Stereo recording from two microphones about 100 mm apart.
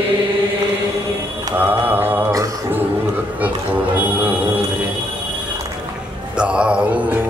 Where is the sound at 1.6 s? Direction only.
20° right (ahead or behind).